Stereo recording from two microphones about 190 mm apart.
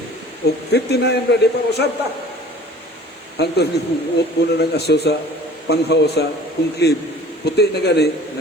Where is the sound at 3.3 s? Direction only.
60° left (ahead or behind).